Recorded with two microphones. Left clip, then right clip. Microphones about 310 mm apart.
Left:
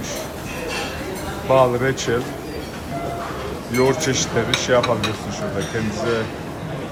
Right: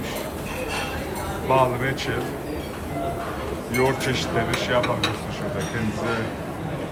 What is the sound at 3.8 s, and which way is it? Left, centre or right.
Speech, centre.